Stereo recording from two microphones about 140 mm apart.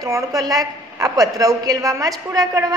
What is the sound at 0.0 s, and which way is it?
A woman's voice, 25° right (ahead or behind).